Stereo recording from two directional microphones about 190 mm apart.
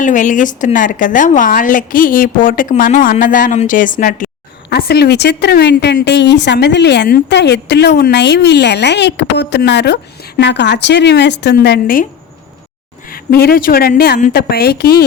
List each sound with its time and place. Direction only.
0.0 s a woman's voice: 40° left (ahead or behind)
4.7 s a woman's voice: 60° left (ahead or behind)
13.1 s a woman's voice: 50° left (ahead or behind)